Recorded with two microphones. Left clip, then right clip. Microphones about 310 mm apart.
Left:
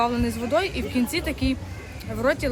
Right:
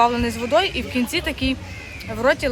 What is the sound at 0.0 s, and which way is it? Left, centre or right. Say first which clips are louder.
Speech: right 6 dB; centre.